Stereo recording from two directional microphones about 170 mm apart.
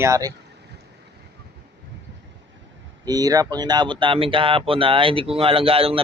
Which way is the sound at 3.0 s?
20° right (ahead or behind).